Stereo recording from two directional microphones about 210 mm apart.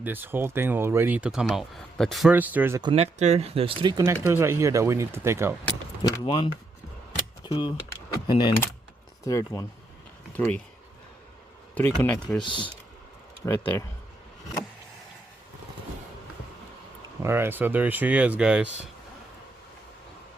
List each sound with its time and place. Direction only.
0.0 s speech: 10° right (ahead or behind)
2.9 s speech: 30° right (ahead or behind); by 5.5 s 10° right (ahead or behind)
6.2 s speech: 25° left (ahead or behind); by 10.6 s 5° left (ahead or behind)
11.7 s speech: 10° left (ahead or behind)
12.4 s speech: 20° left (ahead or behind)
13.4 s speech: 10° left (ahead or behind)
17.2 s speech: 10° right (ahead or behind)